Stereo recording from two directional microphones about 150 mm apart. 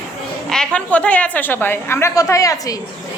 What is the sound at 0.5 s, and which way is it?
A woman's voice, 5° left (ahead or behind).